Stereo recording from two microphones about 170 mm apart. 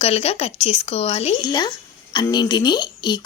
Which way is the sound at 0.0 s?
35° left (ahead or behind).